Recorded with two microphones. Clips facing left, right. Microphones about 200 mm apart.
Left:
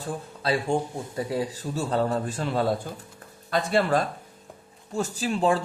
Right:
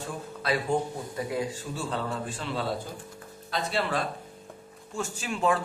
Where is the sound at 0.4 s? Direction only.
30° left (ahead or behind); by 4.0 s 50° left (ahead or behind).